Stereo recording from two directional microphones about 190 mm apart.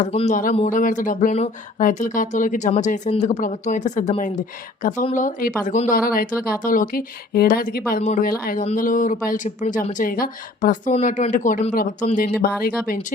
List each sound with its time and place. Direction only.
0.0 s speech: 35° left (ahead or behind); by 13.0 s 50° left (ahead or behind)